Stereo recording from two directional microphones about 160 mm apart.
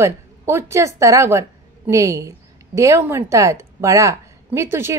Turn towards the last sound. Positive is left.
turn(degrees=-15)  # may be behind; listen again after turning